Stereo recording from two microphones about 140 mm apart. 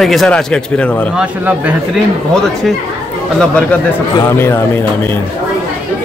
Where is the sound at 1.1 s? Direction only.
10° right (ahead or behind).